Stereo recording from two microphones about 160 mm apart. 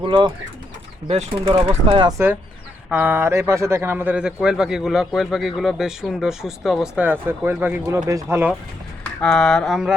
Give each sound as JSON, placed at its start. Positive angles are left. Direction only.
{"t": 0.0, "sound": "speech", "side_deg": -30}
{"t": 1.0, "sound": "speech", "side_deg": -40}
{"t": 2.0, "sound": "a man's voice", "side_deg": -15}
{"t": 9.2, "sound": "a man's voice", "side_deg": 5}